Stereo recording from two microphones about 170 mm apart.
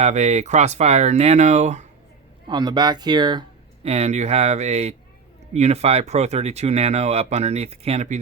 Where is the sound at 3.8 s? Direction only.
40° right (ahead or behind).